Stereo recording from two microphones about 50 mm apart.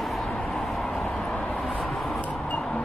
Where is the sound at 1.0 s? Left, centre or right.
Centre.